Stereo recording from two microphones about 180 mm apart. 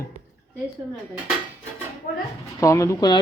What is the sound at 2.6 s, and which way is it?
Speech, 15° left (ahead or behind).